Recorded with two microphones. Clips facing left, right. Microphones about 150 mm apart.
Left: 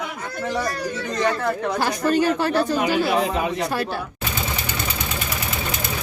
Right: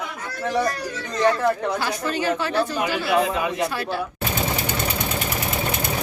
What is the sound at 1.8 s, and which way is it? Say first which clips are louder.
Speech: left 5 dB; 45° left (ahead or behind).